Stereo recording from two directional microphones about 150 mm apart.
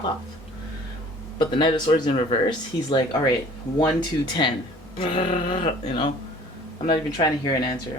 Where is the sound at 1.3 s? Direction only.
30° left (ahead or behind).